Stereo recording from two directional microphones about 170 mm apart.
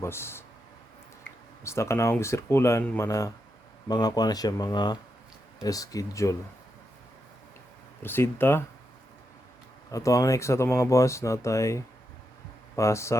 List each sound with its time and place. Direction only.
0.0 s speech: 15° left (ahead or behind)
1.6 s speech: 15° left (ahead or behind)
8.0 s speech: 15° left (ahead or behind)
9.9 s speech: 20° left (ahead or behind)